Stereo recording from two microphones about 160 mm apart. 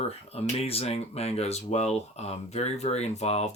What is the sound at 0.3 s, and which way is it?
Speech, 40° left (ahead or behind).